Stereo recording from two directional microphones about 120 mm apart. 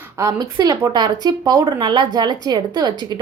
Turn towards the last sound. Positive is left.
turn(degrees=-35)  # may be behind; listen again after turning